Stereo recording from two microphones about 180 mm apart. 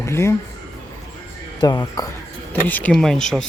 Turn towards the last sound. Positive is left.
turn(degrees=0)  # may be behind; listen again after turning